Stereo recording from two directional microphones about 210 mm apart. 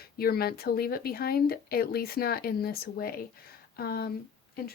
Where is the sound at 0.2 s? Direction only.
45° left (ahead or behind).